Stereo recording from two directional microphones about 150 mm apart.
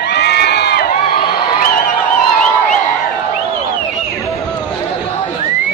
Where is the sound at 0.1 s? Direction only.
90° left.